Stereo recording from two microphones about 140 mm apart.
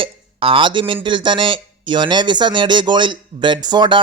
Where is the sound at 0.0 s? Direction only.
40° right (ahead or behind).